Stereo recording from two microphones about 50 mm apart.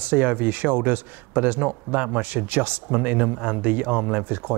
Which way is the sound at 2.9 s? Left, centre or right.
Right.